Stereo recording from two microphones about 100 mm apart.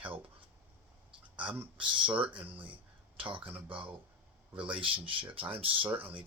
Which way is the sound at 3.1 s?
60° right (ahead or behind).